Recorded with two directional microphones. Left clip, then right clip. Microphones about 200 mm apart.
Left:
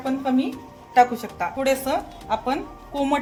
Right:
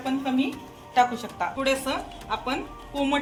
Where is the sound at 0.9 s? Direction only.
45° left (ahead or behind).